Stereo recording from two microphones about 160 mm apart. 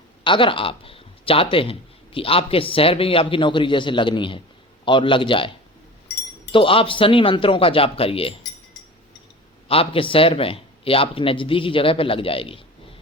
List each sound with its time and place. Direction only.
0.3 s speech: 30° left (ahead or behind)
6.5 s speech: 35° left (ahead or behind)
9.6 s speech: 35° left (ahead or behind)